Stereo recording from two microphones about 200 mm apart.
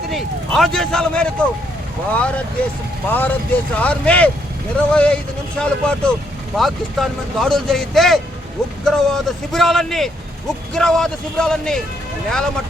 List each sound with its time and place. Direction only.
0.1 s speech: centre (ahead or behind)